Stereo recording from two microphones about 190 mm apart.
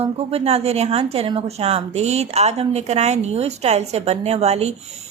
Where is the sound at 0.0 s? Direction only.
30° right (ahead or behind).